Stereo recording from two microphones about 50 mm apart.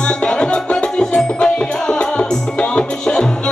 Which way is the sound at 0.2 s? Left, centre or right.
Centre.